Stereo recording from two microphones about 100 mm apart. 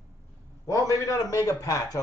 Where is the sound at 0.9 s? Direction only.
35° left (ahead or behind).